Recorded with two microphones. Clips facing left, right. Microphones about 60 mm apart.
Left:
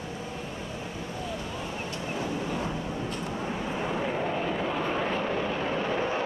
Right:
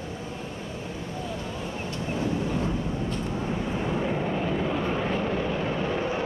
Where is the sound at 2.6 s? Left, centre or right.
Centre.